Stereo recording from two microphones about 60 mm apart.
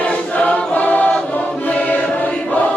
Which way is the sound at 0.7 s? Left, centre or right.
Left.